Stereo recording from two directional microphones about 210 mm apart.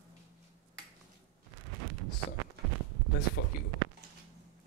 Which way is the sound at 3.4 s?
50° left (ahead or behind).